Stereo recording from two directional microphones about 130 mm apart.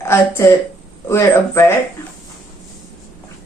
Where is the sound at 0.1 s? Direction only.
20° left (ahead or behind).